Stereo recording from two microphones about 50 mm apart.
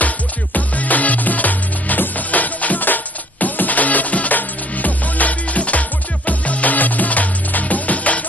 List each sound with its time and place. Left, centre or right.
0.0 s music: left